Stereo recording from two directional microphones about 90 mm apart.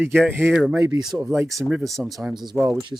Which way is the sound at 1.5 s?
Centre (ahead or behind).